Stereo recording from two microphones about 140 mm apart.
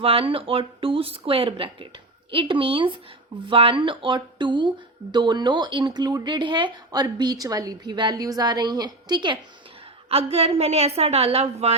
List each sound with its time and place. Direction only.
0.0 s speech: 40° right (ahead or behind)
10.1 s a woman's voice: 45° right (ahead or behind)